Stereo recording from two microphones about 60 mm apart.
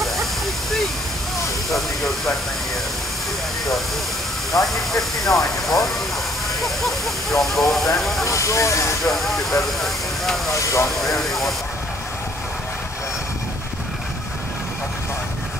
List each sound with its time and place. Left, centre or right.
1.7 s speech: centre
4.5 s speech: centre
8.3 s speech: left
9.0 s speech: centre
9.8 s vehicle: centre
10.5 s speech: left
11.0 s speech: centre